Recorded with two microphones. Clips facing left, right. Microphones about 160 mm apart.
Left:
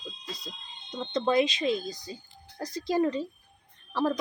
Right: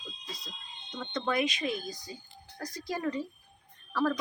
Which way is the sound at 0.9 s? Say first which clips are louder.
Left 6 dB; 25° left (ahead or behind).